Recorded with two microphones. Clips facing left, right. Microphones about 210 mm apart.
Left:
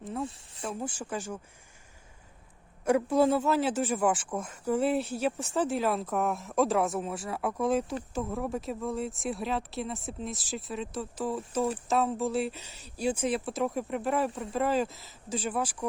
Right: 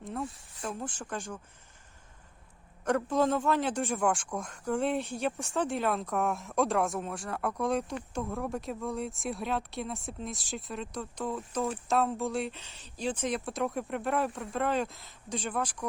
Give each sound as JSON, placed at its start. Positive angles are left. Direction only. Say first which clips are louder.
{"t": 0.0, "sound": "a sound", "louder": "left 2 dB", "side_deg": 0}
{"t": 0.6, "sound": "speech", "louder": "left 2 dB", "side_deg": 5}
{"t": 2.8, "sound": "speech", "louder": "left 3 dB", "side_deg": 10}